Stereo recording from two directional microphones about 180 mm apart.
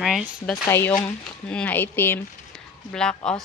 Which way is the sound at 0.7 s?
15° left (ahead or behind).